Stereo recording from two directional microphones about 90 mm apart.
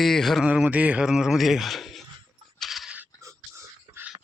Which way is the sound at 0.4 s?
15° right (ahead or behind).